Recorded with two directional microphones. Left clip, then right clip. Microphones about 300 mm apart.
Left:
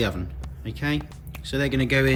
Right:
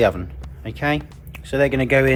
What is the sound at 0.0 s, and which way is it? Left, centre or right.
Speech, centre.